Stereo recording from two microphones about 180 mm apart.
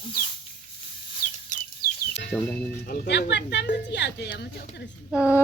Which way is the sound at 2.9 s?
65° left (ahead or behind).